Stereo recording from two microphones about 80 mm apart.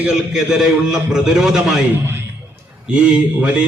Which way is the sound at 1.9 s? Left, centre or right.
Right.